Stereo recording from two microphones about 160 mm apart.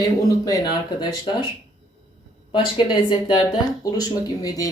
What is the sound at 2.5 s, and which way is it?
Speech, 30° left (ahead or behind).